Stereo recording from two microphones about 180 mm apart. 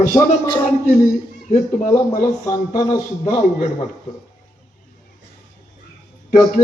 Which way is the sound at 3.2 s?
40° left (ahead or behind).